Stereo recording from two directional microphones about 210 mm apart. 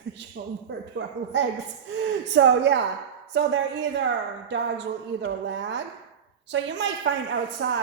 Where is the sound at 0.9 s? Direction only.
60° right (ahead or behind).